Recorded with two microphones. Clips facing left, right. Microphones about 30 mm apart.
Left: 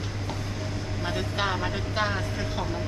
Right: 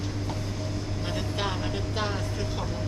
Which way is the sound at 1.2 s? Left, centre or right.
Centre.